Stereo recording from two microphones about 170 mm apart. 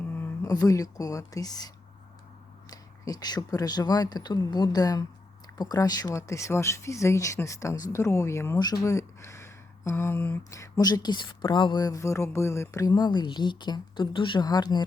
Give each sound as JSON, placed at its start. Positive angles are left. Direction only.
{"t": 0.0, "sound": "speech", "side_deg": 10}